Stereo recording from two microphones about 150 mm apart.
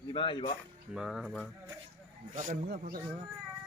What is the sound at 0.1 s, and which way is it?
Speech, 35° left (ahead or behind).